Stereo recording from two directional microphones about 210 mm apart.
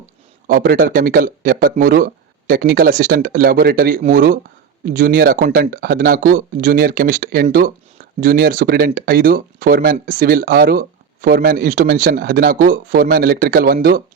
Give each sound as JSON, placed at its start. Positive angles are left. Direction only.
{"t": 0.4, "sound": "speech", "side_deg": -40}